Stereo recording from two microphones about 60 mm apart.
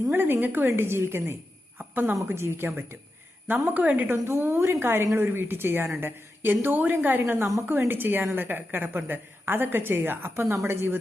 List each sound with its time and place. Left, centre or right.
0.1 s a woman's voice: right
3.4 s speech: right
4.1 s a woman's voice: right